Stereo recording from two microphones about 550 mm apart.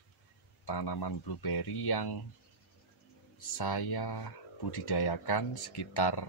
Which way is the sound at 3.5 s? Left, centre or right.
Left.